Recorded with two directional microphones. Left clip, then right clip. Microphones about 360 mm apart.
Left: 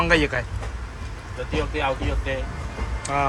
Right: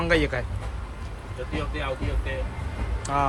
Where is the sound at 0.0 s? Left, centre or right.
Centre.